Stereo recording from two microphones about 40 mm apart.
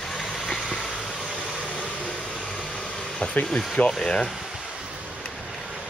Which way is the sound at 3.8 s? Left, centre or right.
Left.